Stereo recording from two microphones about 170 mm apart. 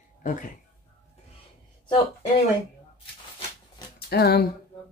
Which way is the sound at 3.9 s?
70° left (ahead or behind).